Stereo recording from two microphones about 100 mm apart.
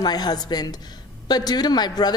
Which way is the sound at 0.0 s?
45° left (ahead or behind).